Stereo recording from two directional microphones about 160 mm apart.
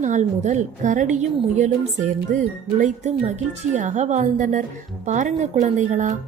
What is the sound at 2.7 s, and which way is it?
Speech, 50° right (ahead or behind).